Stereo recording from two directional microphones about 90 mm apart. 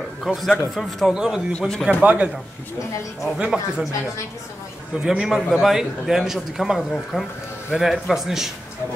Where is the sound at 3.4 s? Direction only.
10° right (ahead or behind).